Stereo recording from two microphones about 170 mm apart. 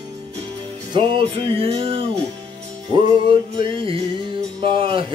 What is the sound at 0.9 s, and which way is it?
Music, 30° right (ahead or behind).